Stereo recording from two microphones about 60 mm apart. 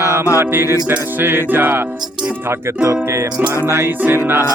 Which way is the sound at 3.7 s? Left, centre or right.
Right.